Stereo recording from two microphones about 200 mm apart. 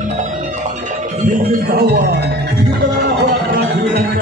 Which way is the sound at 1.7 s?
55° right (ahead or behind).